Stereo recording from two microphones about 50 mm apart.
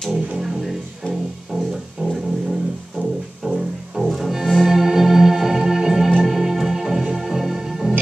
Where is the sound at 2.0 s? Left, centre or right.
Right.